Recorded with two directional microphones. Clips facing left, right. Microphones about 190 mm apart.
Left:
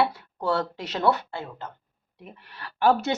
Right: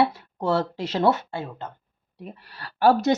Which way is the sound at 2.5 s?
35° right (ahead or behind).